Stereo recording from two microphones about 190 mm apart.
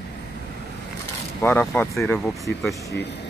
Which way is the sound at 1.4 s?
10° left (ahead or behind).